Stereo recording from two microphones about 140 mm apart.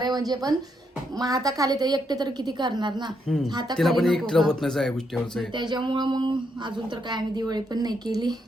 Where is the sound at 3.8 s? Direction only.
Centre (ahead or behind).